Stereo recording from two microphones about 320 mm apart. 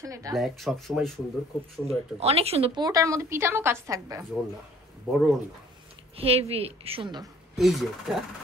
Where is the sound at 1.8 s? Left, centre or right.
Centre.